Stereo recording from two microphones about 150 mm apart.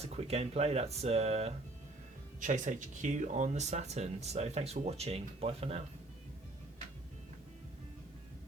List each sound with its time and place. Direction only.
0.0 s speech: 45° right (ahead or behind)
2.4 s speech: 55° right (ahead or behind)